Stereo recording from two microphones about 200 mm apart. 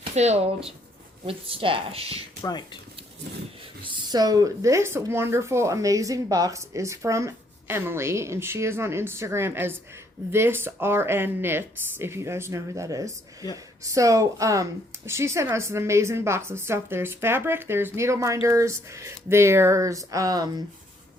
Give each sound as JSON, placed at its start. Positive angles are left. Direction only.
{"t": 0.1, "sound": "speech", "side_deg": -35}
{"t": 2.4, "sound": "speech", "side_deg": 20}
{"t": 3.8, "sound": "speech", "side_deg": -20}